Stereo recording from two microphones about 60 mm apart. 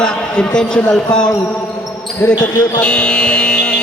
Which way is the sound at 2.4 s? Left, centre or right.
Centre.